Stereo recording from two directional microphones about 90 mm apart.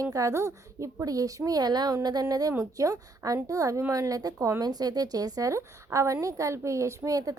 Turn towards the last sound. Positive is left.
turn(degrees=-40)  # may be behind; listen again after turning